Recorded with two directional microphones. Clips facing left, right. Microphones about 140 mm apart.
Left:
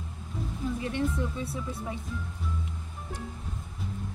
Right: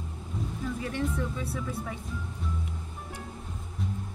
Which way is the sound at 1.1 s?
25° left (ahead or behind).